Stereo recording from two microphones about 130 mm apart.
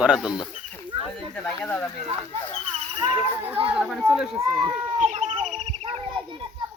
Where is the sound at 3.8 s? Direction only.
Centre (ahead or behind).